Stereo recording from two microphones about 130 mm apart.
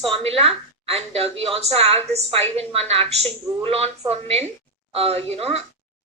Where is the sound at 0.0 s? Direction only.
50° right (ahead or behind).